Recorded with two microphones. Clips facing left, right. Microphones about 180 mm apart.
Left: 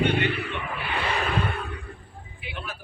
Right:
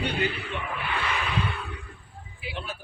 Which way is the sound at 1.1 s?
40° left (ahead or behind).